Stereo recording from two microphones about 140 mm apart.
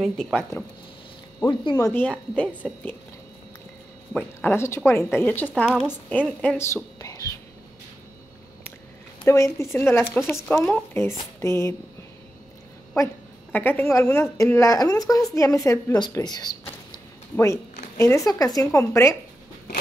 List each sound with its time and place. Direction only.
0.0 s speech: centre (ahead or behind)
1.4 s speech: 35° left (ahead or behind)
1.9 s a woman's voice: 10° left (ahead or behind)
4.1 s a woman's voice: 10° left (ahead or behind)
5.7 s speech: 5° right (ahead or behind)
6.0 s a woman's voice: 10° left (ahead or behind)
9.2 s a woman's voice: 20° left (ahead or behind)
11.3 s a sound: 20° left (ahead or behind)
12.9 s a woman's voice: 20° left (ahead or behind)